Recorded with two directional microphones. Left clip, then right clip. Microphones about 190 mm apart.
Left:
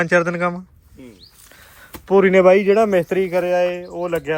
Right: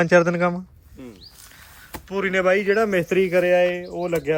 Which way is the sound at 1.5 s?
Centre (ahead or behind).